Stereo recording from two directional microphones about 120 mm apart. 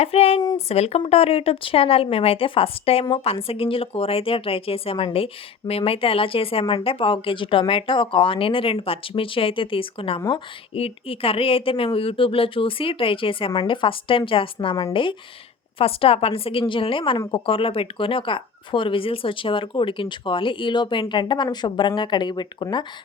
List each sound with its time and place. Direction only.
0.0 s speech: 55° left (ahead or behind)
10.2 s a woman's voice: 35° left (ahead or behind)
10.8 s speech: 55° left (ahead or behind)